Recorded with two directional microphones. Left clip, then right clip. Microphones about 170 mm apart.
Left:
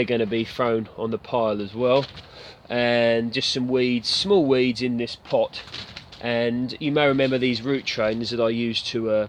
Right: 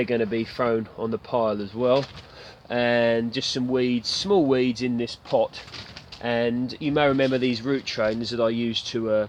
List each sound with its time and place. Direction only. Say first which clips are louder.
0.0 s speech: left 1 dB; 20° left (ahead or behind); by 5.5 s centre (ahead or behind)
6.2 s speech: left 1 dB; 15° left (ahead or behind)